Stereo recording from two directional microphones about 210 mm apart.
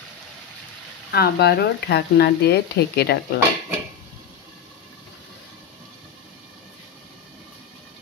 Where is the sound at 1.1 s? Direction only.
50° left (ahead or behind).